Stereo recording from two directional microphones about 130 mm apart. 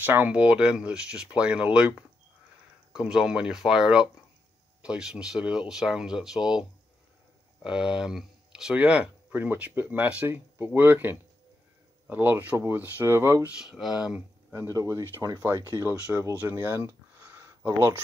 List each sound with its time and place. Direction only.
0.0 s speech: 15° right (ahead or behind)
7.6 s speech: 5° right (ahead or behind)
13.5 s speech: 5° right (ahead or behind)
14.5 s speech: 25° right (ahead or behind)